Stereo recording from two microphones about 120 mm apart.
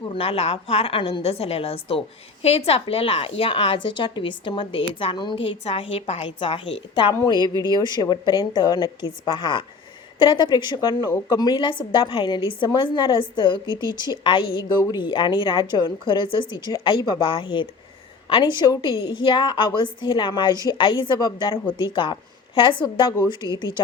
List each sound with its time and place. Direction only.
0.1 s a woman's voice: 50° left (ahead or behind)